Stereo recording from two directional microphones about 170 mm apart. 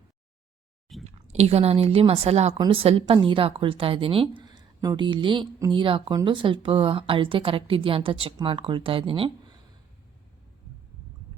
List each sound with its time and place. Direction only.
1.0 s a woman's voice: 40° right (ahead or behind)